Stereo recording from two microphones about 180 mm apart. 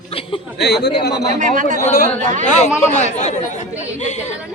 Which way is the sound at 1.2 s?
45° right (ahead or behind).